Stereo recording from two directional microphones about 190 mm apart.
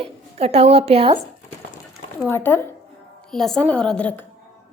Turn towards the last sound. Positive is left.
turn(degrees=5)  # may be behind; listen again after turning